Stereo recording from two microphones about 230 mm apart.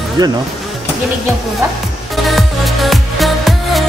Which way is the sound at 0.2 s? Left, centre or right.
Centre.